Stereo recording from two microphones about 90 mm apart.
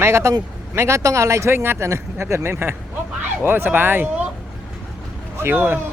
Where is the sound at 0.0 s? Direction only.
30° right (ahead or behind).